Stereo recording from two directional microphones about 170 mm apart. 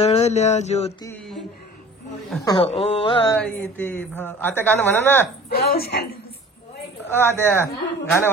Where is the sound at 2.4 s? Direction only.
30° left (ahead or behind).